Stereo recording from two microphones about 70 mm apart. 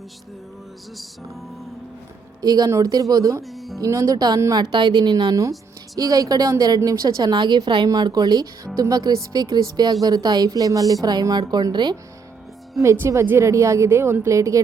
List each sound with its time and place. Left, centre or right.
2.4 s speech: right
2.6 s speech: right
3.4 s music: centre
3.8 s speech: right
4.5 s speech: right
7.9 s speech: right
12.8 s a woman's voice: right
14.3 s speech: right